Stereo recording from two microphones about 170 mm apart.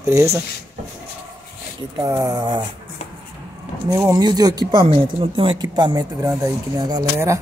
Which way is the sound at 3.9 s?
20° right (ahead or behind).